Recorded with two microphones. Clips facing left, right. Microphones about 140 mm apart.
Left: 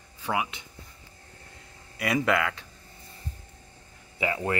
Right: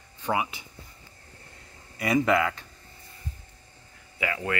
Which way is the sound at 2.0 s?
Centre (ahead or behind).